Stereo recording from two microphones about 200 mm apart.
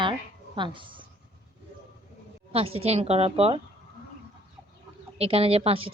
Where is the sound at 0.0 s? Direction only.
25° right (ahead or behind).